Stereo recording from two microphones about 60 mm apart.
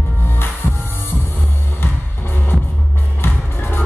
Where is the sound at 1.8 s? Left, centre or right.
Left.